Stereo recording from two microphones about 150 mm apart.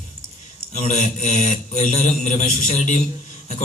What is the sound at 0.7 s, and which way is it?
A man's voice, 55° left (ahead or behind).